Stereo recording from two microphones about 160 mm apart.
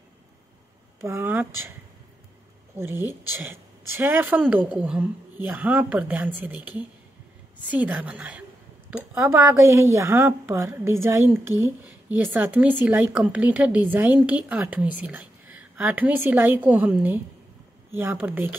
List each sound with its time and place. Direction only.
1.0 s a woman's voice: 15° right (ahead or behind)
2.7 s a woman's voice: 15° right (ahead or behind)